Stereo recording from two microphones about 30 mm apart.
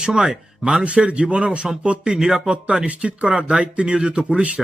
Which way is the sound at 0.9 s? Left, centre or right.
Right.